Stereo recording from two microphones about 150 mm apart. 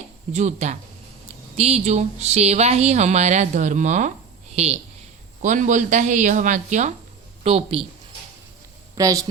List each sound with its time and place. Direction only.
0.3 s speech: 50° right (ahead or behind)
5.4 s speech: 55° right (ahead or behind)
7.4 s a woman's voice: 40° right (ahead or behind)
9.0 s a woman's voice: 25° right (ahead or behind)